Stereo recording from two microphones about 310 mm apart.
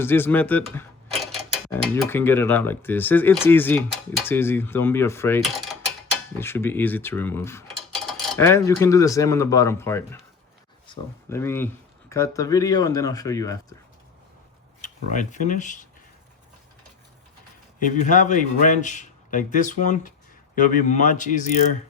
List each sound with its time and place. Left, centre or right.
0.0 s speech: centre
14.8 s speech: left
17.7 s a man's voice: left